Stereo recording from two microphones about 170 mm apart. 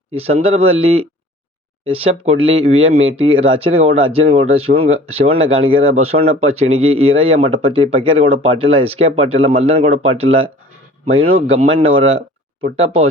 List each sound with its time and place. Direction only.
0.1 s speech: 35° right (ahead or behind)